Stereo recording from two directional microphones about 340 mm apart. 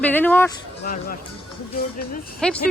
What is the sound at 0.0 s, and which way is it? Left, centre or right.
Speech, centre.